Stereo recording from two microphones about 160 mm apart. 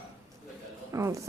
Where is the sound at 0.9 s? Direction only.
20° right (ahead or behind).